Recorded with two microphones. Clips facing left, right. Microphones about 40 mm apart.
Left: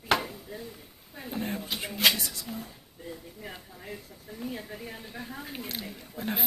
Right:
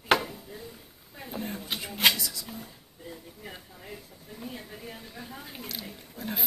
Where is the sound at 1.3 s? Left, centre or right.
Left.